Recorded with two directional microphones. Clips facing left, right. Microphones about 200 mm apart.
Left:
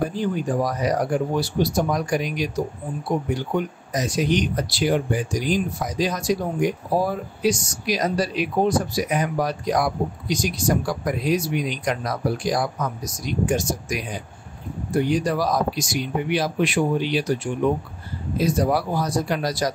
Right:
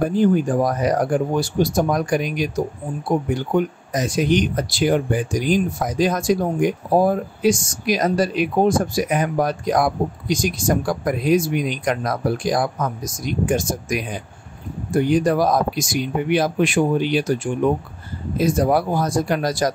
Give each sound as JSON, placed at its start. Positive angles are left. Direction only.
{"t": 0.0, "sound": "speech", "side_deg": -50}
{"t": 18.4, "sound": "speech", "side_deg": -50}